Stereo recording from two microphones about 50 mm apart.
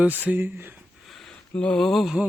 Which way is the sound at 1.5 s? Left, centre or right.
Left.